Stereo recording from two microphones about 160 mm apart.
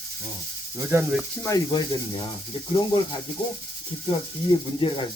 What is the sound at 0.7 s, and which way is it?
Speech, 15° right (ahead or behind).